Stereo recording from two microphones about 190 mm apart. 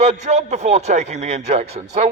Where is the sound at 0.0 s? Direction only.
35° right (ahead or behind).